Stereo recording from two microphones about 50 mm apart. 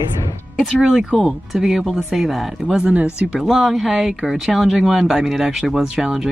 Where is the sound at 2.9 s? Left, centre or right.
Right.